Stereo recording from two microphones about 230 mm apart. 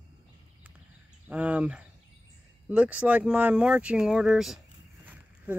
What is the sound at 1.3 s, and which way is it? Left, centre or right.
Speech, centre.